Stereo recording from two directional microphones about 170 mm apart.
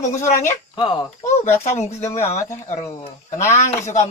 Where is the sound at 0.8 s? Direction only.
25° left (ahead or behind).